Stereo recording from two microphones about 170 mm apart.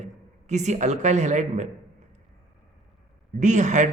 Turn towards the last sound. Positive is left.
turn(degrees=-45)  # may be behind; listen again after turning